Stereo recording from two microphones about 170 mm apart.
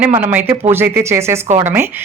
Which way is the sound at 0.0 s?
10° right (ahead or behind).